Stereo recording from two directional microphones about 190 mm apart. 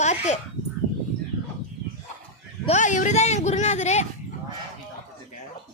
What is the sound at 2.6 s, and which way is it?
Speech, 40° left (ahead or behind).